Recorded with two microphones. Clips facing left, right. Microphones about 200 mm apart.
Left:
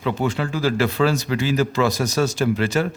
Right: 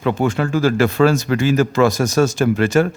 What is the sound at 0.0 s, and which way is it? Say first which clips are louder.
Speech: right 4 dB; 50° right (ahead or behind).